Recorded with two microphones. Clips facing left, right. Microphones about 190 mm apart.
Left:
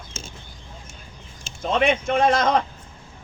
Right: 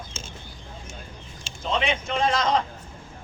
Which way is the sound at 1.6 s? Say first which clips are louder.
Left 5 dB; 50° left (ahead or behind).